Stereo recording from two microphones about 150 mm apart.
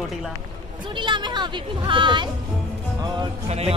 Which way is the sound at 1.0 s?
30° right (ahead or behind).